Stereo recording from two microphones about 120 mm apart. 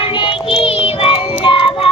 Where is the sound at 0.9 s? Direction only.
50° left (ahead or behind).